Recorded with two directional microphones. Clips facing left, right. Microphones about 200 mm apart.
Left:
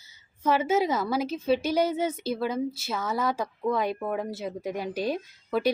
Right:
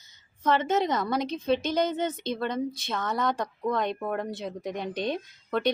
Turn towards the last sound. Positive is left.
turn(degrees=5)  # may be behind; listen again after turning